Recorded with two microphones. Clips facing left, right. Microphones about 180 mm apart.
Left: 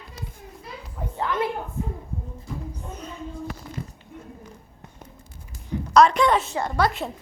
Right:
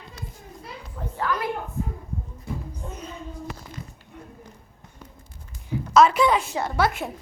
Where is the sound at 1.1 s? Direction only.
20° left (ahead or behind).